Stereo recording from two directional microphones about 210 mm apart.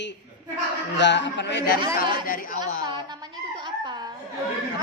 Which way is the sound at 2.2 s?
40° left (ahead or behind).